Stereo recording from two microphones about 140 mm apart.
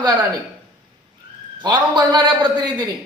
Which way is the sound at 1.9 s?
30° right (ahead or behind).